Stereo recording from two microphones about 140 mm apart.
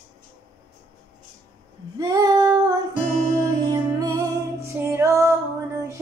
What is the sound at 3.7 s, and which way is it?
Music, 25° right (ahead or behind).